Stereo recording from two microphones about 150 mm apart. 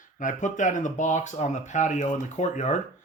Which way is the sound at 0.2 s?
55° left (ahead or behind).